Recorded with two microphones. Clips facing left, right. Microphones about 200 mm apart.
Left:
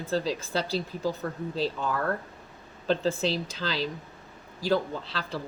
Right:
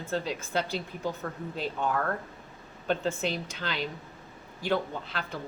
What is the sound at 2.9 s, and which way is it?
Speech, 35° left (ahead or behind).